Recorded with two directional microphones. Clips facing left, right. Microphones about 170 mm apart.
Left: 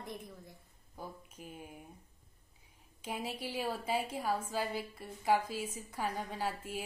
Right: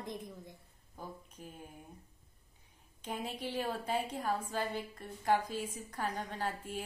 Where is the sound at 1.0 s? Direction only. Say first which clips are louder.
Even; 10° left (ahead or behind).